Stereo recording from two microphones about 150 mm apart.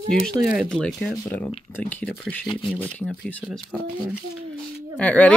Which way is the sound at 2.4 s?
30° left (ahead or behind).